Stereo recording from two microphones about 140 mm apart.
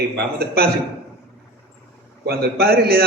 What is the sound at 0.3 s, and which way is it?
Speech, 90° right.